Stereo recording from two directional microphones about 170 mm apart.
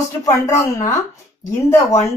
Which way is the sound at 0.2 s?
15° left (ahead or behind).